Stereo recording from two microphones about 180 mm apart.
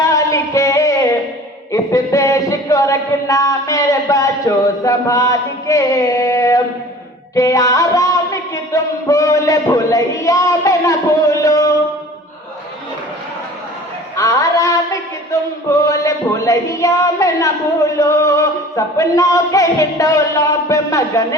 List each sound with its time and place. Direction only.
0.0 s music: 20° left (ahead or behind)
1.7 s speech: 20° left (ahead or behind)
7.3 s music: 20° left (ahead or behind)
14.2 s a sound: 20° left (ahead or behind)